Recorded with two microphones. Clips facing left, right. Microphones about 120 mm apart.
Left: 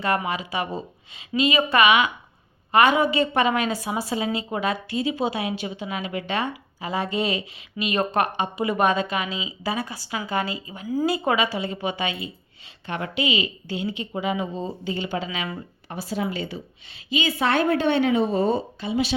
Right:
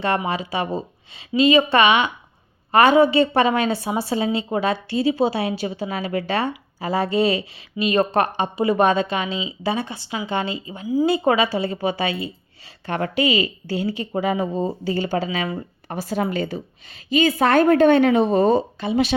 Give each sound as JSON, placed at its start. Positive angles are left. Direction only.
{"t": 0.3, "sound": "speech", "side_deg": -30}
{"t": 15.9, "sound": "a woman's voice", "side_deg": -55}